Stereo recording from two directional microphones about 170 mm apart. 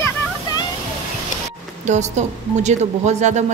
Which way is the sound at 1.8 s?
45° right (ahead or behind).